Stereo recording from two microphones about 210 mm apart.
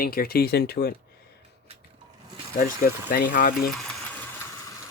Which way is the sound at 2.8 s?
45° left (ahead or behind).